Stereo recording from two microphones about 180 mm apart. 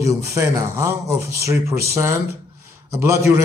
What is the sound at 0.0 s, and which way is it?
A man's voice, 15° right (ahead or behind).